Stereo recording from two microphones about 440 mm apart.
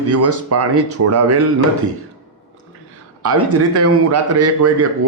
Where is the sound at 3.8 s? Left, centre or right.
Right.